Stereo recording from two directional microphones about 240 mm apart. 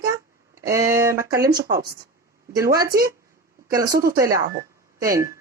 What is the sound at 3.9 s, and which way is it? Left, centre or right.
Speech, right.